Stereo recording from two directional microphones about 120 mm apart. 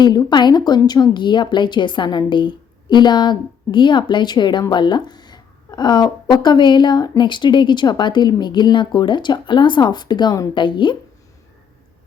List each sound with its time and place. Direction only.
0.0 s a woman's voice: 35° left (ahead or behind)